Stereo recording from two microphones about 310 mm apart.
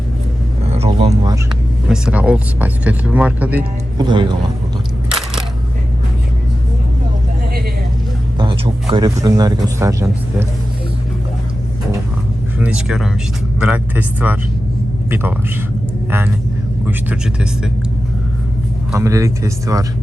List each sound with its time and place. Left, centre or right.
0.7 s a sound: centre
1.9 s speech: centre
8.4 s speech: centre
12.5 s speech: centre
16.8 s speech: centre
18.9 s speech: centre